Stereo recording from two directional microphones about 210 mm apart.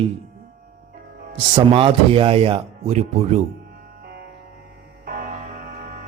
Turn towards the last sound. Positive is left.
turn(degrees=-40)  # may be behind; listen again after turning